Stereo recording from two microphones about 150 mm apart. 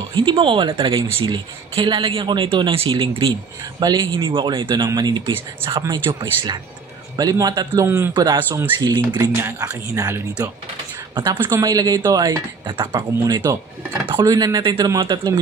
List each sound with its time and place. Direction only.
0.1 s speech: 30° right (ahead or behind)
7.2 s speech: 25° right (ahead or behind)
8.4 s speech: 15° right (ahead or behind)
8.7 s speech: 30° right (ahead or behind)
9.4 s speech: 20° right (ahead or behind)
11.3 s speech: 15° right (ahead or behind)